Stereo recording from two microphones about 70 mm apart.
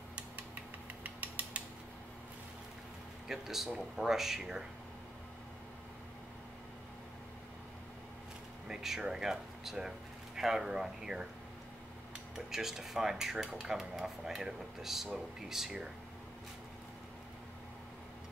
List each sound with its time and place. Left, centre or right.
1.0 s mechanisms: right
3.3 s speech: centre
3.7 s dishes: centre
8.6 s speech: centre
12.4 s dishes: centre
15.4 s speech: centre